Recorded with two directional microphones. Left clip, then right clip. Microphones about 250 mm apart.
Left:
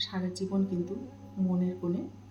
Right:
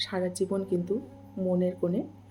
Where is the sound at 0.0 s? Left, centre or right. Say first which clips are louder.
Right 6 dB; right.